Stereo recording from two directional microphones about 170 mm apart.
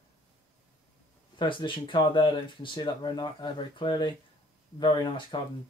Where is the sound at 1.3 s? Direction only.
30° left (ahead or behind).